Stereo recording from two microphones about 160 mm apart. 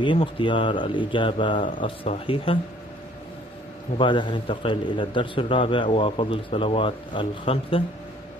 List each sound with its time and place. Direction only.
0.0 s a man's voice: 30° left (ahead or behind)
4.0 s a man's voice: 30° left (ahead or behind)